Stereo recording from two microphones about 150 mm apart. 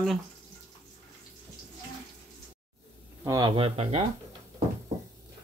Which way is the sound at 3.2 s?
25° right (ahead or behind).